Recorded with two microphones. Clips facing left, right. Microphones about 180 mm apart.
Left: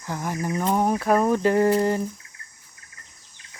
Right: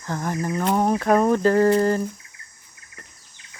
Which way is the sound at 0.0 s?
10° left (ahead or behind).